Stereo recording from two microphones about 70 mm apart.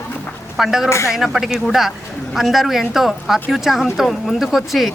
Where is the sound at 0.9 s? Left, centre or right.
Left.